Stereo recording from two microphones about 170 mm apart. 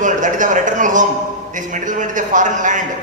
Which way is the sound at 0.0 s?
50° right (ahead or behind).